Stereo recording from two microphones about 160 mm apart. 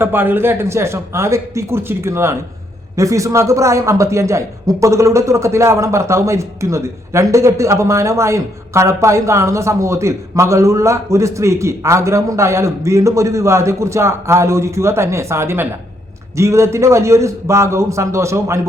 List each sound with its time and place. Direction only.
0.0 s a man's voice: 15° right (ahead or behind)